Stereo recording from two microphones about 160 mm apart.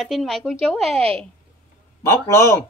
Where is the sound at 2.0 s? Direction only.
20° left (ahead or behind).